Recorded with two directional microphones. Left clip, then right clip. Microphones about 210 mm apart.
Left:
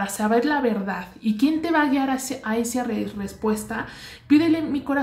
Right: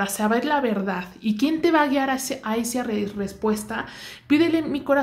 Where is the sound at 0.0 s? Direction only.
45° right (ahead or behind).